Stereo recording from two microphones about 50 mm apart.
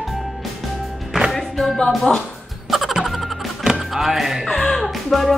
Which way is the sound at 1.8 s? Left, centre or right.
Centre.